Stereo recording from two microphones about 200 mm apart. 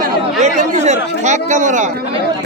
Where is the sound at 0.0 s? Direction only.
35° right (ahead or behind).